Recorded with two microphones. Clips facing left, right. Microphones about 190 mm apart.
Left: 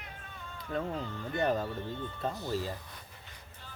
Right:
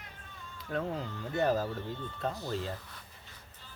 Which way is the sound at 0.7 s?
Centre (ahead or behind).